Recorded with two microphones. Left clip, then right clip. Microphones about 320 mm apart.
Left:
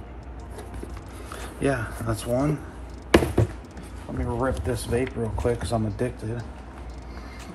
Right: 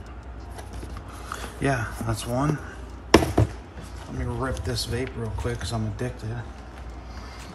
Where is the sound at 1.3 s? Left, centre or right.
Centre.